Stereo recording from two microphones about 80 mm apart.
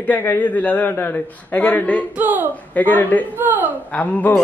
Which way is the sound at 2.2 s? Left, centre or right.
Right.